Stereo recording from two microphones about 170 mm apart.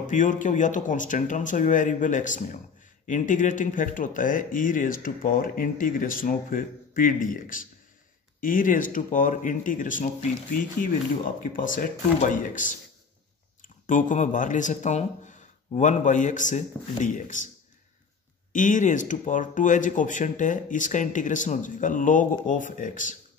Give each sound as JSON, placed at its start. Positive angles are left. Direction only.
{"t": 0.0, "sound": "speech", "side_deg": 50}
{"t": 11.5, "sound": "speech", "side_deg": 50}
{"t": 13.8, "sound": "speech", "side_deg": 50}
{"t": 18.5, "sound": "speech", "side_deg": 50}